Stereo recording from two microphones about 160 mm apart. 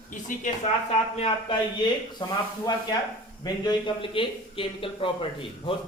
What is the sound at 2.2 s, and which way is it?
Speech, 30° left (ahead or behind).